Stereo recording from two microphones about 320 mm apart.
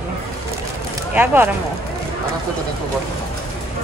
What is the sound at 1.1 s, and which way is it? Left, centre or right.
Speech, centre.